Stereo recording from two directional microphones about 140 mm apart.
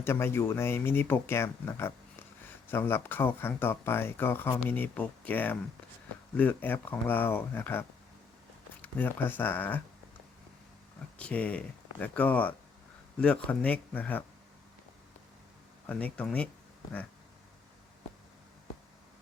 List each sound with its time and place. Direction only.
0.0 s speech: 15° left (ahead or behind)
11.2 s speech: 10° left (ahead or behind)
15.9 s speech: 10° left (ahead or behind)